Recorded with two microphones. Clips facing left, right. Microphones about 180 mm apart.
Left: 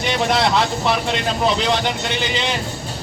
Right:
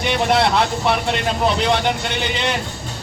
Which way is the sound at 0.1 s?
55° right (ahead or behind).